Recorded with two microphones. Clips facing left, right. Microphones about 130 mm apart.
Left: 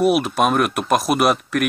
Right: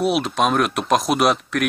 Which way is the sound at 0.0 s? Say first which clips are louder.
Left 3 dB; 5° left (ahead or behind).